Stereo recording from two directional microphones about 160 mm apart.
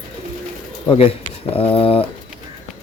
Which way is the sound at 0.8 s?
35° left (ahead or behind).